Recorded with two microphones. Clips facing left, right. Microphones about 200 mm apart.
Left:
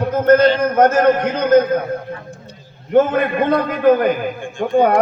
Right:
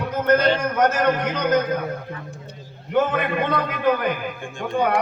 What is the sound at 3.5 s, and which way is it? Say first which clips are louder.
Speech: left 9 dB; 50° left (ahead or behind).